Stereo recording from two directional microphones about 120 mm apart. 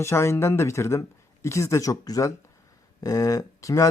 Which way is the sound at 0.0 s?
20° left (ahead or behind).